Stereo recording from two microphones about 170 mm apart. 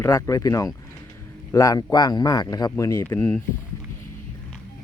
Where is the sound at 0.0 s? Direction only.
15° left (ahead or behind).